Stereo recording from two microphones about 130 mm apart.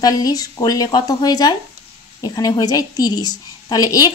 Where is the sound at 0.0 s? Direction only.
30° left (ahead or behind).